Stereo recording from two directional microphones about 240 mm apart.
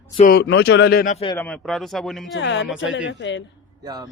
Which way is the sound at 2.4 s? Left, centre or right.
Left.